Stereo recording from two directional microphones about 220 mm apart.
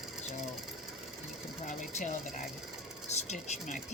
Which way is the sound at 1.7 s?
35° left (ahead or behind).